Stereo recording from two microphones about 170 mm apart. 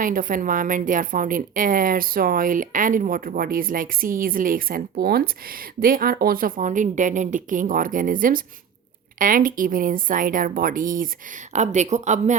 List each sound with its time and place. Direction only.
0.0 s a woman's voice: 55° right (ahead or behind)